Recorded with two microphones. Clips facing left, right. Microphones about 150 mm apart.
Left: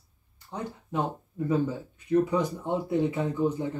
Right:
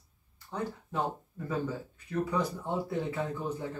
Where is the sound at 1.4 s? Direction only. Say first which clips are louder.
Left 8 dB; 15° left (ahead or behind).